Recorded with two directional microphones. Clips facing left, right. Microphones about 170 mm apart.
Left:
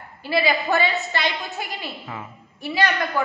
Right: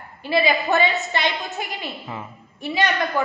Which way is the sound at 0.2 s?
20° right (ahead or behind).